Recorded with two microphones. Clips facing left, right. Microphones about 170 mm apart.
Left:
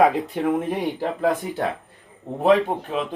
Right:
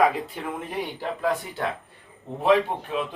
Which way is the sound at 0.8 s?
45° left (ahead or behind).